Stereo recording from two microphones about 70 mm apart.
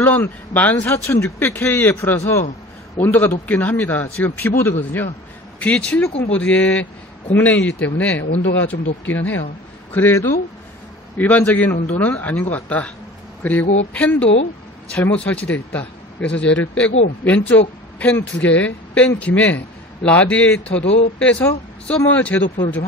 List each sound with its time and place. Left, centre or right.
0.0 s speech: left
1.0 s speech: left
1.4 s speech: left
3.0 s speech: left
5.6 s speech: centre